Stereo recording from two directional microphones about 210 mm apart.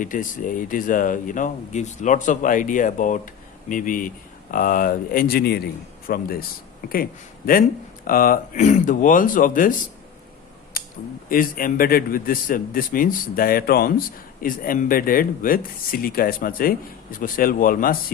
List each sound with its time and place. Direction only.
0.0 s a man's voice: 40° left (ahead or behind)
11.3 s speech: 40° left (ahead or behind)